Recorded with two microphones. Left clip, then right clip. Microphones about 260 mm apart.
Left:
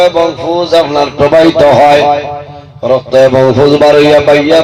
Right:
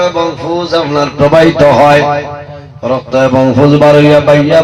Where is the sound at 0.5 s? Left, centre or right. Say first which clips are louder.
Left 3 dB; left.